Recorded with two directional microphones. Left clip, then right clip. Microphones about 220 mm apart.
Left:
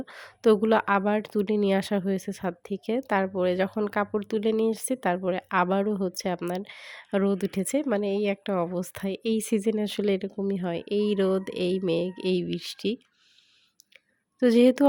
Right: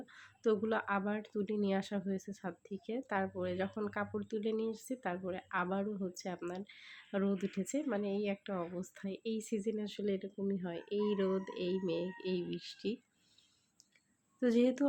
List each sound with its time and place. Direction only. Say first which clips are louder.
0.0 s speech: left 12 dB; 40° left (ahead or behind)
14.3 s speech: left 12 dB; 40° left (ahead or behind)